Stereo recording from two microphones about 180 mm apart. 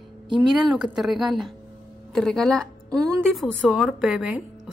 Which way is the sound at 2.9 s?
20° right (ahead or behind).